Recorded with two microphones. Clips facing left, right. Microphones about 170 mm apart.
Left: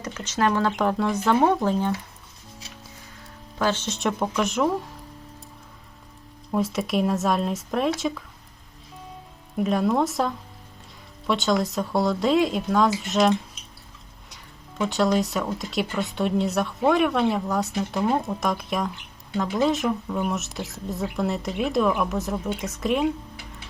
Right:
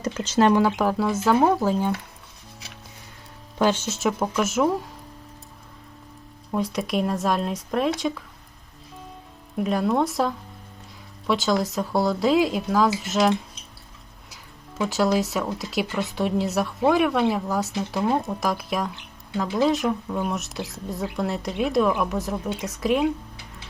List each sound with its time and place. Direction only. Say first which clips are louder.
0.0 s speech: right 4 dB; 30° right (ahead or behind)
0.5 s speech: right 2 dB; 5° right (ahead or behind)
3.6 s speech: right 3 dB; 10° right (ahead or behind)
6.5 s speech: left 1 dB; centre (ahead or behind)
9.6 s speech: even; centre (ahead or behind)
14.8 s speech: even; centre (ahead or behind)